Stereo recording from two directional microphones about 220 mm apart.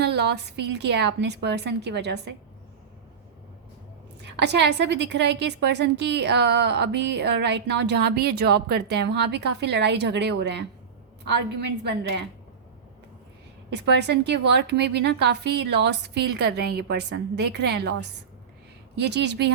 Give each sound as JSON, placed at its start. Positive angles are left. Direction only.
{"t": 0.0, "sound": "a woman's voice", "side_deg": -50}
{"t": 4.2, "sound": "a woman's voice", "side_deg": -50}
{"t": 13.7, "sound": "a woman's voice", "side_deg": -50}
{"t": 18.9, "sound": "a woman's voice", "side_deg": -50}